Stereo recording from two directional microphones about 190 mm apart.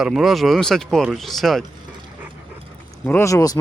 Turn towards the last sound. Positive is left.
turn(degrees=20)  # may be behind; listen again after turning